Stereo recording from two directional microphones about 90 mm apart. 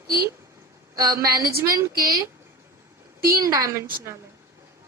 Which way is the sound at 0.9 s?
45° right (ahead or behind).